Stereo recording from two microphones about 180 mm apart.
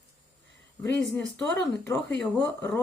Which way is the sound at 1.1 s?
5° left (ahead or behind).